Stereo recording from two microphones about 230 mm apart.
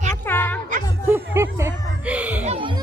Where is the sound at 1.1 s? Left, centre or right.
Centre.